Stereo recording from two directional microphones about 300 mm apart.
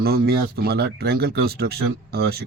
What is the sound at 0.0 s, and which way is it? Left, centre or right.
Speech, right.